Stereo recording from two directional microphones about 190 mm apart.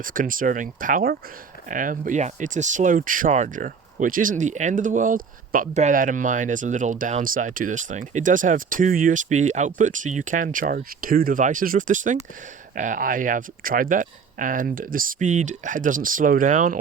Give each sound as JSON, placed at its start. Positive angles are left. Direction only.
{"t": 0.0, "sound": "speech", "side_deg": -45}